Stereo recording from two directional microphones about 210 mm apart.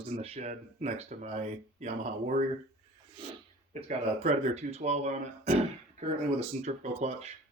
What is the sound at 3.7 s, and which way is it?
Speech, 35° right (ahead or behind).